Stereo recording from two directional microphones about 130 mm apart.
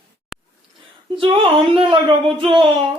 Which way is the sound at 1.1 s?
45° right (ahead or behind).